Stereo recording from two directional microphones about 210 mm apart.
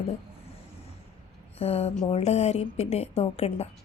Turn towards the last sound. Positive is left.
turn(degrees=30)  # may be behind; listen again after turning